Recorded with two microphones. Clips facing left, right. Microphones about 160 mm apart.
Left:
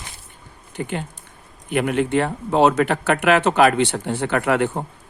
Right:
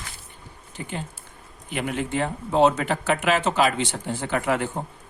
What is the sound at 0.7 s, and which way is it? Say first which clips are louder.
Speech: left 6 dB; 65° left (ahead or behind).